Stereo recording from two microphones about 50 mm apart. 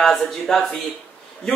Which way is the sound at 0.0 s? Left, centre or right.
Centre.